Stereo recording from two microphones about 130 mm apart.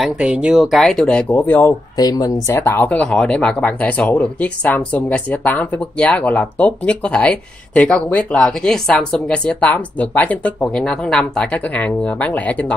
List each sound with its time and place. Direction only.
0.0 s speech: 10° right (ahead or behind); by 1.8 s 15° left (ahead or behind)
2.0 s speech: 30° left (ahead or behind)
2.4 s speech: 20° left (ahead or behind)